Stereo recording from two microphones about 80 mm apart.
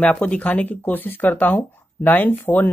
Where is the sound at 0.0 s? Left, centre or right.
Centre.